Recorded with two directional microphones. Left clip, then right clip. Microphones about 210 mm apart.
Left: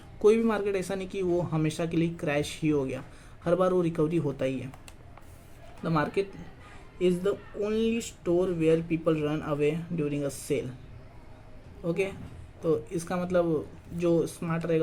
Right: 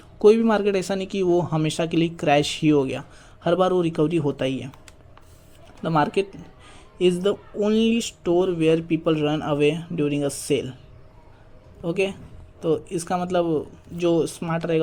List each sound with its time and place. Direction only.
0.2 s speech: 25° right (ahead or behind)
5.8 s speech: 30° right (ahead or behind)
11.9 s speech: 25° right (ahead or behind)